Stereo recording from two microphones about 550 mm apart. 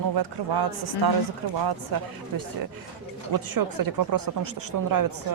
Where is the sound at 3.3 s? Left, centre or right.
Right.